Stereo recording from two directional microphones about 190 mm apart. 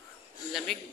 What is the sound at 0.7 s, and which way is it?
Speech, centre (ahead or behind).